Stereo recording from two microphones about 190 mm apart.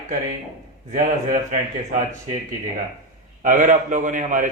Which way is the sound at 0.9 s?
45° right (ahead or behind).